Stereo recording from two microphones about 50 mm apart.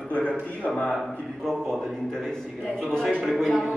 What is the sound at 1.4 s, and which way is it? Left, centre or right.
A man's voice, centre.